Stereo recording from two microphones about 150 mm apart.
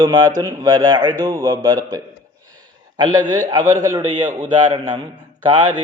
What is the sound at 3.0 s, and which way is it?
Speech, 25° right (ahead or behind).